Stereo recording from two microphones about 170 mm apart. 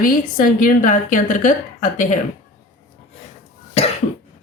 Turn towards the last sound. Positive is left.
turn(degrees=35)  # may be behind; listen again after turning